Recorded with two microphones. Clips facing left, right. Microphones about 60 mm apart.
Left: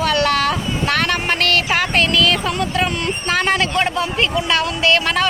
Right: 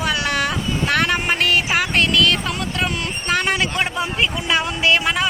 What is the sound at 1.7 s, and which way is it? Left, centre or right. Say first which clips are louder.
Speech: left 1 dB; centre.